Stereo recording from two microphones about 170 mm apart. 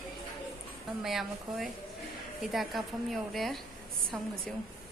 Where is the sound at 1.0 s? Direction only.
Centre (ahead or behind).